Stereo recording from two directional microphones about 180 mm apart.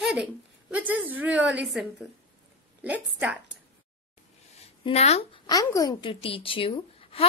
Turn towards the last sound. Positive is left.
turn(degrees=30)  # may be behind; listen again after turning